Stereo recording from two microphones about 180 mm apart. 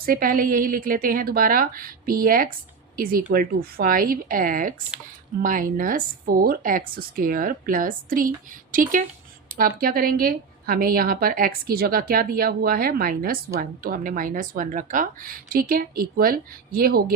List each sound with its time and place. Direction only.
0.0 s a woman's voice: 55° right (ahead or behind)